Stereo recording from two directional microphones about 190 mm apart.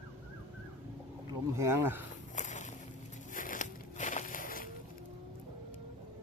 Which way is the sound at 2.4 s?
40° left (ahead or behind).